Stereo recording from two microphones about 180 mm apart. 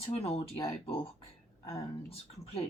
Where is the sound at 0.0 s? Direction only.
35° left (ahead or behind).